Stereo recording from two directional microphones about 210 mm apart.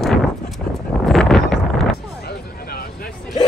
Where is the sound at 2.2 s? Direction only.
45° left (ahead or behind).